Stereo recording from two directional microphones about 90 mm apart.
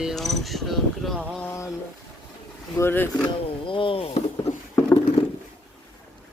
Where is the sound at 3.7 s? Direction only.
75° left (ahead or behind).